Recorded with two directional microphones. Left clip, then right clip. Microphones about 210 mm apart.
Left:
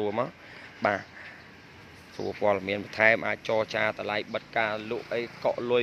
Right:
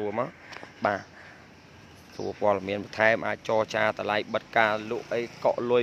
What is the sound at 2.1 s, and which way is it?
Speech, centre (ahead or behind).